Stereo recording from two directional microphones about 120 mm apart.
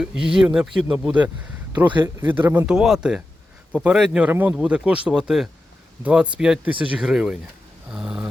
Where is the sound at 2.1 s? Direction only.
15° right (ahead or behind).